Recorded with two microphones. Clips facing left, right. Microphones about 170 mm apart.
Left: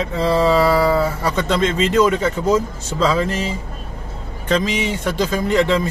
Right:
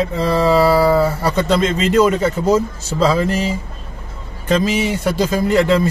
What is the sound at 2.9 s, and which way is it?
Speech, 10° right (ahead or behind).